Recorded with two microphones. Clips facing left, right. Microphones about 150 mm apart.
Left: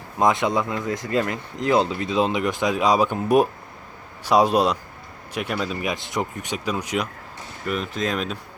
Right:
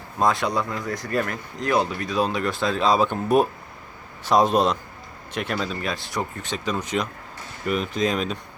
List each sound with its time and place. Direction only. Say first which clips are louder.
0.2 s speech: left 2 dB; 20° left (ahead or behind)
5.9 s speech: left 2 dB; 20° left (ahead or behind); by 8.4 s centre (ahead or behind)